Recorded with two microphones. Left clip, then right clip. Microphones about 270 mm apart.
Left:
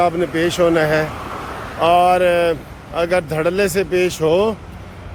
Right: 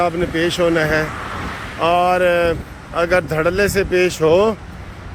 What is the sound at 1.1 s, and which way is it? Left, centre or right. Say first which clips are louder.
Vehicle: right 1 dB; left.